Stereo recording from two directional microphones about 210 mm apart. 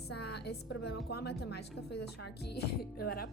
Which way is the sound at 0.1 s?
50° left (ahead or behind).